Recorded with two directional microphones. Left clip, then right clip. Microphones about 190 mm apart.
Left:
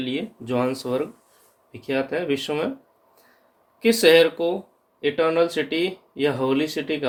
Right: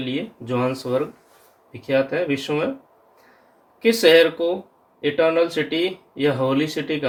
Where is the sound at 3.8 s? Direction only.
50° left (ahead or behind).